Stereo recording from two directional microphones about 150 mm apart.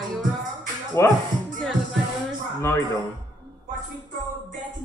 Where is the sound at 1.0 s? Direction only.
20° left (ahead or behind).